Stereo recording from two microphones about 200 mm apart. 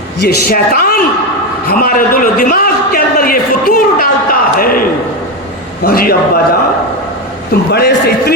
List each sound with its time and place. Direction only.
0.2 s a man's voice: 50° left (ahead or behind)
7.7 s a man's voice: 55° left (ahead or behind)